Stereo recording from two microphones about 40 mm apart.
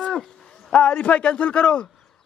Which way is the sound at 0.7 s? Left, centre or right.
Left.